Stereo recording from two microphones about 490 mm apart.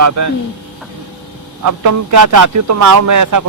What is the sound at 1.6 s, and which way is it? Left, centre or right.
Speech, right.